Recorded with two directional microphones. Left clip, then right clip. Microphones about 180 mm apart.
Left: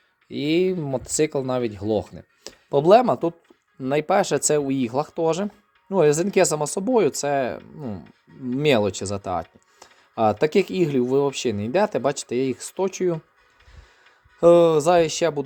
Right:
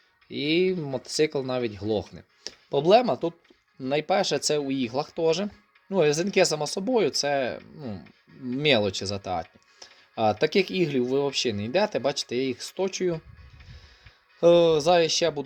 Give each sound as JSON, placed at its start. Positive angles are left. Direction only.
{"t": 0.3, "sound": "speech", "side_deg": 25}
{"t": 14.3, "sound": "speech", "side_deg": 25}